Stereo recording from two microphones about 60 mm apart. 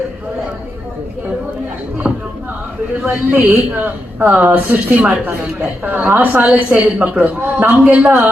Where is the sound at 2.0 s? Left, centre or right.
Right.